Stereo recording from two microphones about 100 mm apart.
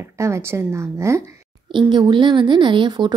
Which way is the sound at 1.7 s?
50° right (ahead or behind).